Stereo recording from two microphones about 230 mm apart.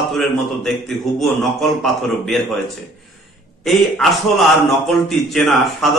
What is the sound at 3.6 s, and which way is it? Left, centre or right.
A man's voice, centre.